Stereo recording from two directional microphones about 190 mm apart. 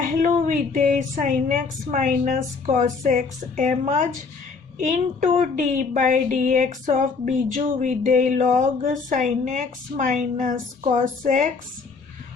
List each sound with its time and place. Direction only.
0.0 s a woman's voice: 45° right (ahead or behind)